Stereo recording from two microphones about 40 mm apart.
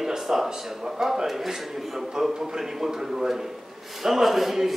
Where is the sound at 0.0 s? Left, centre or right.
Centre.